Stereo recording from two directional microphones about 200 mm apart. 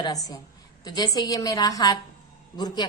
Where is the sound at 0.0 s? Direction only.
20° left (ahead or behind).